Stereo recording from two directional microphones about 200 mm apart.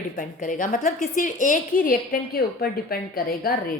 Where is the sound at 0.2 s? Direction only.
40° left (ahead or behind).